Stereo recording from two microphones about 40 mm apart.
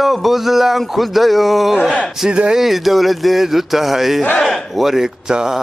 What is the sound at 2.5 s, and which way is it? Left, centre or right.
Speech, centre.